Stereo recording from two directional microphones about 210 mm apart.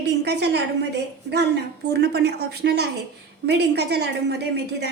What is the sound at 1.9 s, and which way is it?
A woman's voice, 50° right (ahead or behind).